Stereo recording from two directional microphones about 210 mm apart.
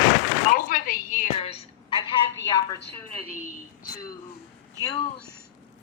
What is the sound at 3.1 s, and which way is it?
Speech, 40° left (ahead or behind).